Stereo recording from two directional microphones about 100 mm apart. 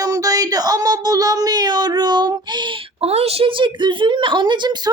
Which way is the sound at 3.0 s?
90° right.